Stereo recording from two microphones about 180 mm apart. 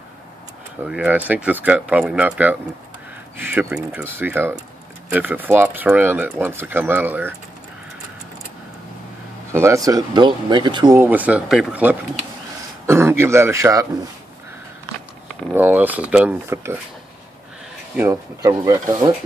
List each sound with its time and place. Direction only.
0.8 s speech: 10° right (ahead or behind)
9.5 s speech: 15° right (ahead or behind)
11.0 s speech: 10° right (ahead or behind)
15.5 s speech: 10° right (ahead or behind)
17.9 s speech: 15° right (ahead or behind)